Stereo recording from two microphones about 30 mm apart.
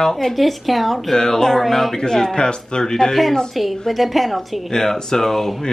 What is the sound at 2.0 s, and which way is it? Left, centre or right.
Speech, left.